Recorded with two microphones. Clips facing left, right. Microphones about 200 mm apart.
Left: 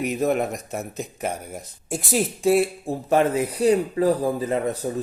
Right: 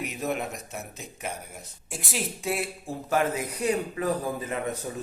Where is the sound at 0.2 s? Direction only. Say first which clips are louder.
Left 6 dB; 45° left (ahead or behind).